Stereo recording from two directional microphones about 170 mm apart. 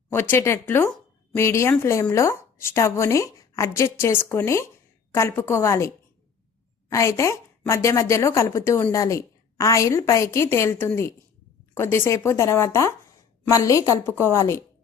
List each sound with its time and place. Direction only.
0.1 s a woman's voice: 15° left (ahead or behind)
6.9 s a woman's voice: 15° left (ahead or behind)